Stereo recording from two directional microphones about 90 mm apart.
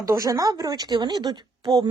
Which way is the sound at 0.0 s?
40° right (ahead or behind).